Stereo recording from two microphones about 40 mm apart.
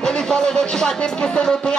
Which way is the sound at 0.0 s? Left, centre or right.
Centre.